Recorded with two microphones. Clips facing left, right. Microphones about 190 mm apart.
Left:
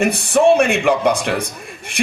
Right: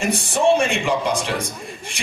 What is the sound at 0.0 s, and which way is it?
A man's voice, 60° left (ahead or behind).